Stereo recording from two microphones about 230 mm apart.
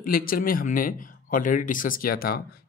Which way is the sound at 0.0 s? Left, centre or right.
Left.